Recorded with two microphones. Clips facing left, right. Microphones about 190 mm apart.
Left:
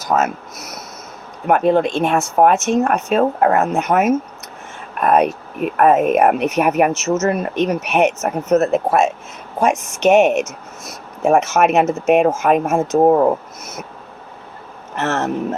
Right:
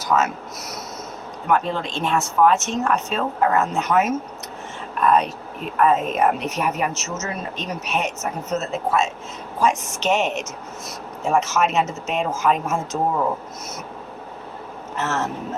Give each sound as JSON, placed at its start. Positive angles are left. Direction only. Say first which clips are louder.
{"t": 0.0, "sound": "speech", "louder": "left 3 dB", "side_deg": 50}
{"t": 14.9, "sound": "speech", "louder": "left 5 dB", "side_deg": 65}